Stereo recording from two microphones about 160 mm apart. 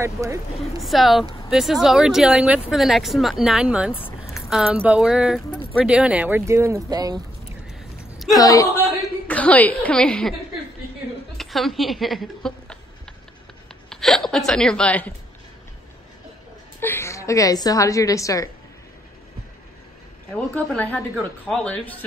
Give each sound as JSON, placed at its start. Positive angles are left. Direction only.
{"t": 0.0, "sound": "speech", "side_deg": -20}
{"t": 0.8, "sound": "a woman's voice", "side_deg": 0}
{"t": 8.4, "sound": "a woman's voice", "side_deg": 20}
{"t": 9.0, "sound": "a woman's voice", "side_deg": 10}
{"t": 11.3, "sound": "a woman's voice", "side_deg": 0}
{"t": 13.8, "sound": "a woman's voice", "side_deg": 0}
{"t": 16.8, "sound": "a woman's voice", "side_deg": 15}
{"t": 20.3, "sound": "a woman's voice", "side_deg": 5}